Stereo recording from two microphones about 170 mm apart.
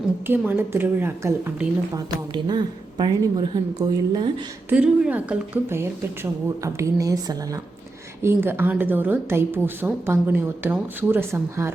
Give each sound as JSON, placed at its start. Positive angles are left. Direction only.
{"t": 0.3, "sound": "a woman's voice", "side_deg": -15}
{"t": 4.7, "sound": "a woman's voice", "side_deg": -10}